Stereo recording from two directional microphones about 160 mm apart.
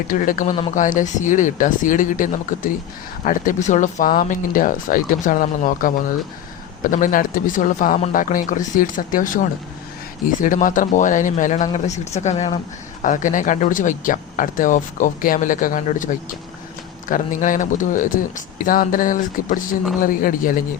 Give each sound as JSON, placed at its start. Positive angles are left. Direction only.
{"t": 0.1, "sound": "speech", "side_deg": 60}
{"t": 17.1, "sound": "speech", "side_deg": 55}